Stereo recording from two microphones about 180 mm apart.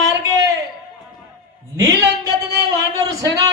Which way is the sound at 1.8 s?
20° right (ahead or behind).